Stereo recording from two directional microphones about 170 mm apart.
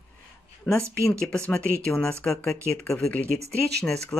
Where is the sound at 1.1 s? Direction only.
5° left (ahead or behind).